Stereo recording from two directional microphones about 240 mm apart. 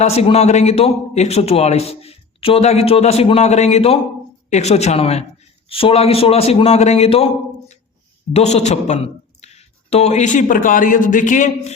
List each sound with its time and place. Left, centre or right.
0.0 s a man's voice: left
8.3 s a man's voice: left